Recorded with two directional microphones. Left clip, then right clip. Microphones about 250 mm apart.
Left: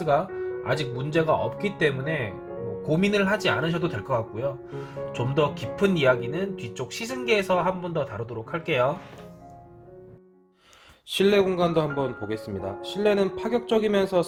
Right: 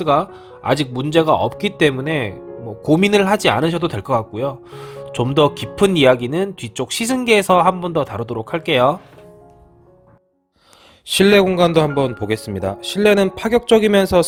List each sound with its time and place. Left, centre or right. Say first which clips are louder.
0.6 s speech: right 12 dB; right
11.0 s speech: right 8 dB; right